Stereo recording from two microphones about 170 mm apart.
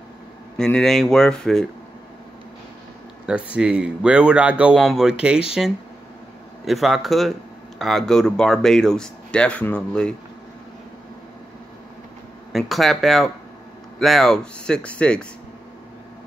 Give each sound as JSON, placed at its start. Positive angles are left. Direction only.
{"t": 0.6, "sound": "speech", "side_deg": 5}
{"t": 3.3, "sound": "speech", "side_deg": -5}
{"t": 12.5, "sound": "speech", "side_deg": 0}